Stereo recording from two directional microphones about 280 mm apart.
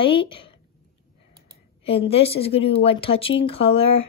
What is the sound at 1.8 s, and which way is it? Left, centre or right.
A woman's voice, left.